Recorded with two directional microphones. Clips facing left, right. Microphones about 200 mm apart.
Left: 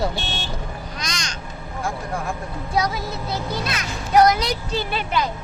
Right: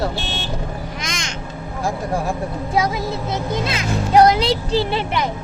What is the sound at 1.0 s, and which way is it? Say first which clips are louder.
Crow: right 3 dB; 25° right (ahead or behind).